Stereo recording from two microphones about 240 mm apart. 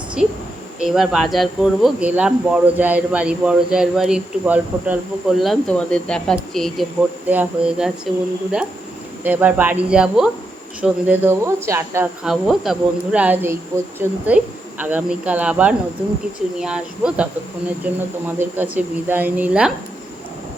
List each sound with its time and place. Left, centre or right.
0.2 s speech: centre
9.2 s speech: centre